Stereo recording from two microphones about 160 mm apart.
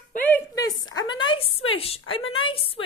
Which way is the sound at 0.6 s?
25° left (ahead or behind).